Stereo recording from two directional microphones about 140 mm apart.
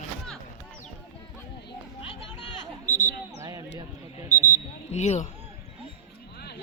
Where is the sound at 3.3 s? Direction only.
25° right (ahead or behind).